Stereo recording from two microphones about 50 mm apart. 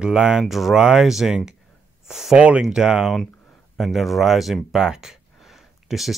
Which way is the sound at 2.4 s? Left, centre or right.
Right.